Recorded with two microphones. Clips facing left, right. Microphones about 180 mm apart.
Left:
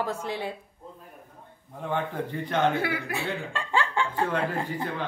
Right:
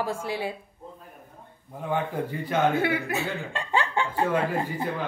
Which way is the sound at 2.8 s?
20° right (ahead or behind).